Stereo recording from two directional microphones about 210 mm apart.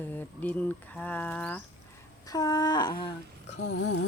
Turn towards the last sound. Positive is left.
turn(degrees=60)  # may be behind; listen again after turning